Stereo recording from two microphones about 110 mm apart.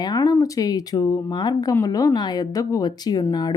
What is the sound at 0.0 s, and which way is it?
Speech, 40° left (ahead or behind).